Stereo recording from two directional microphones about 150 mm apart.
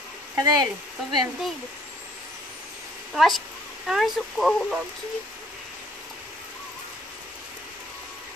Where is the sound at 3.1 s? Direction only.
Centre (ahead or behind).